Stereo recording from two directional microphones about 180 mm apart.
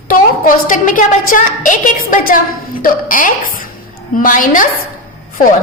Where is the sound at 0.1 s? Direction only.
50° left (ahead or behind).